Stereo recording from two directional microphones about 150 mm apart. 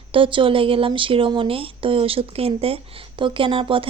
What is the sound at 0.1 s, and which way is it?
A woman's voice, 35° right (ahead or behind).